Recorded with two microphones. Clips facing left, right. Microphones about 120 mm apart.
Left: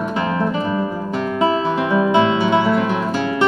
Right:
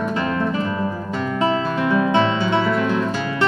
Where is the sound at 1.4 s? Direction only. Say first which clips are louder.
Left 2 dB; 20° left (ahead or behind).